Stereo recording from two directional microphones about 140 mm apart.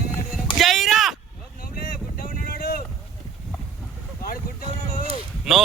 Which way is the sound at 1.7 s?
85° left.